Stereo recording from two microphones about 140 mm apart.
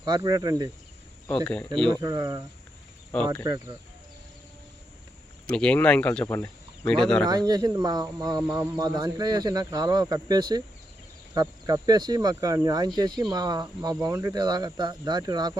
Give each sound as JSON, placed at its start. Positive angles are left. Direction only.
{"t": 0.0, "sound": "speech", "side_deg": -30}
{"t": 1.9, "sound": "speech", "side_deg": -25}
{"t": 3.4, "sound": "speech", "side_deg": -25}
{"t": 5.5, "sound": "speech", "side_deg": 10}
{"t": 6.2, "sound": "speech", "side_deg": 20}
{"t": 6.8, "sound": "speech", "side_deg": 5}
{"t": 7.3, "sound": "speech", "side_deg": -30}